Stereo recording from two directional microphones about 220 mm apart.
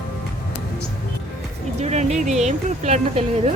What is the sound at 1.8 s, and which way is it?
Music, 30° right (ahead or behind).